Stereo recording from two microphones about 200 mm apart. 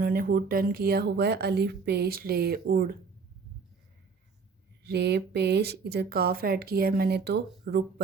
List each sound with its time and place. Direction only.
0.0 s speech: 45° right (ahead or behind)
4.8 s speech: 55° right (ahead or behind)